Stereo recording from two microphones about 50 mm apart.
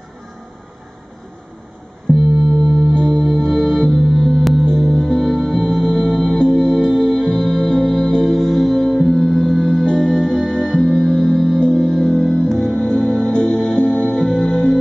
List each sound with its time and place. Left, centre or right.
2.1 s music: centre
2.7 s singing bowl: centre
3.3 s music: centre